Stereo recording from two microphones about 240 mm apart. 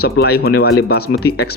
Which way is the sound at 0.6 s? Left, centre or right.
Left.